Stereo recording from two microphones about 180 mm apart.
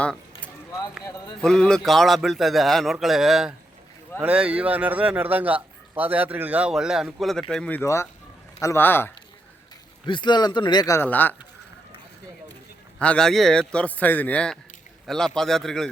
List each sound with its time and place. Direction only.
1.4 s a man's voice: 5° left (ahead or behind)
10.1 s speech: 25° left (ahead or behind); by 11.3 s 10° left (ahead or behind)
13.0 s a man's voice: 5° left (ahead or behind)